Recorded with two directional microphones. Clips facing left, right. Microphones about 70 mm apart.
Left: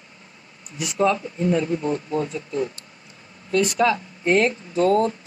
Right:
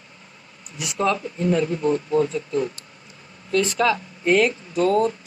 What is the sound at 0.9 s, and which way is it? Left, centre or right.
Speech, left.